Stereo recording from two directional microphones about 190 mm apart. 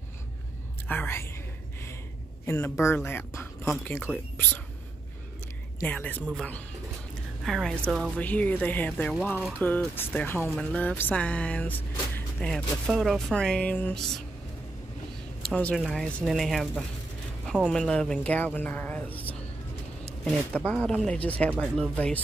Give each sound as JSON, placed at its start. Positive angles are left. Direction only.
{"t": 0.8, "sound": "speech", "side_deg": 10}
{"t": 2.4, "sound": "speech", "side_deg": 10}
{"t": 5.8, "sound": "speech", "side_deg": 10}
{"t": 15.5, "sound": "speech", "side_deg": 5}